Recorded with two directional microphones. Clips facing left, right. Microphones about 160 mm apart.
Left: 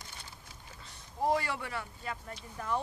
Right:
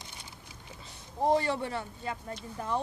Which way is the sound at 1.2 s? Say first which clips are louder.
Right 4 dB; 25° right (ahead or behind).